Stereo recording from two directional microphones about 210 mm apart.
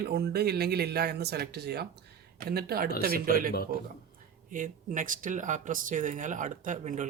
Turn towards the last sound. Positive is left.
turn(degrees=-35)  # may be behind; listen again after turning